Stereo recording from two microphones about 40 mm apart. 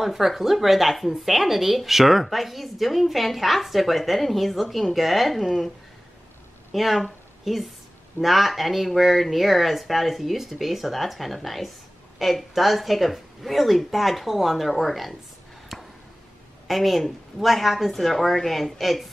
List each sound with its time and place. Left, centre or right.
0.0 s a woman's voice: centre
6.7 s a woman's voice: centre
15.7 s a sound: centre
16.6 s a woman's voice: centre